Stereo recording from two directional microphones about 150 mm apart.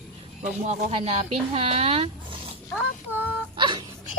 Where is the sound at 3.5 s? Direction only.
30° right (ahead or behind).